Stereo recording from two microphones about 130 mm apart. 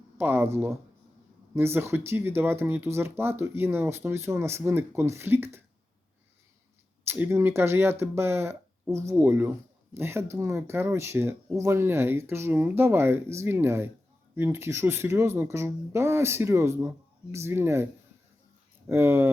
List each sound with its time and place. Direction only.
0.2 s speech: 15° right (ahead or behind)
7.1 s speech: 20° right (ahead or behind)
18.9 s speech: 20° right (ahead or behind)